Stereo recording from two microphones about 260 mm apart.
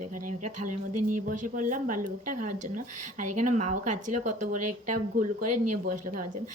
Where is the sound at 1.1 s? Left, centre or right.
Right.